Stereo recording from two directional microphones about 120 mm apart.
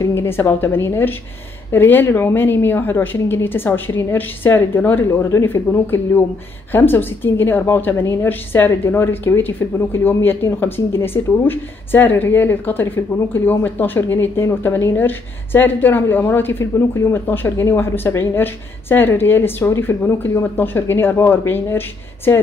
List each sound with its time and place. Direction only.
0.0 s a woman's voice: 20° left (ahead or behind)